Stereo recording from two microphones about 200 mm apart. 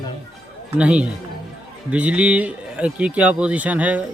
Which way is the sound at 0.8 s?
5° right (ahead or behind).